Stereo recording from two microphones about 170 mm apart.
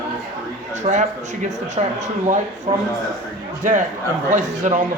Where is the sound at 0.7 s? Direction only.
45° right (ahead or behind).